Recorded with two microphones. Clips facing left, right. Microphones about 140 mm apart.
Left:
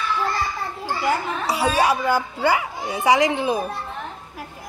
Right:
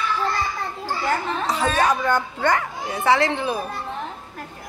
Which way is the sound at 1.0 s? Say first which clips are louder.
Left 1 dB; 10° left (ahead or behind).